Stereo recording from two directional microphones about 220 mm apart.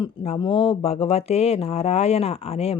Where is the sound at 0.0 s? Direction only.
25° left (ahead or behind).